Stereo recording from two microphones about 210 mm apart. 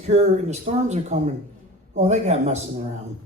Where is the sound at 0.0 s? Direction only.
30° right (ahead or behind).